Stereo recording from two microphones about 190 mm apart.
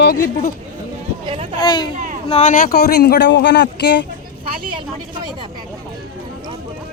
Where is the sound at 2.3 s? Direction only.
40° left (ahead or behind); by 4.0 s 60° left (ahead or behind).